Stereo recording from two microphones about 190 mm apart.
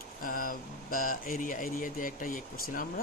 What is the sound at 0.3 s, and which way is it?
Speech, 45° left (ahead or behind).